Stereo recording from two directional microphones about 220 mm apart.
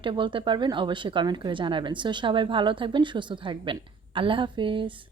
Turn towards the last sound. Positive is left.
turn(degrees=-25)  # may be behind; listen again after turning